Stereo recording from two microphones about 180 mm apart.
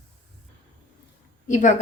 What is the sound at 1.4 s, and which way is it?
Speech, 45° left (ahead or behind).